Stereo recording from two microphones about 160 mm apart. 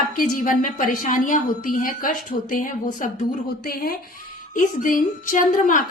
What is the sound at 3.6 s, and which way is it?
Speech, 65° left (ahead or behind).